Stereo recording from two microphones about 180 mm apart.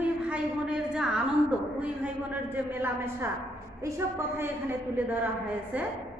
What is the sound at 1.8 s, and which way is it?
A woman's voice, 10° right (ahead or behind).